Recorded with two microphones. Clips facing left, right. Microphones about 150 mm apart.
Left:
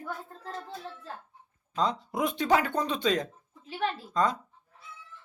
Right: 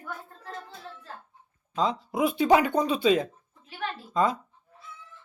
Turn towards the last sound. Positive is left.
turn(degrees=-5)  # may be behind; listen again after turning